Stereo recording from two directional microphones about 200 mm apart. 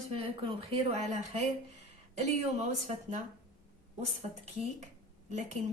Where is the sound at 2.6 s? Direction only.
30° right (ahead or behind).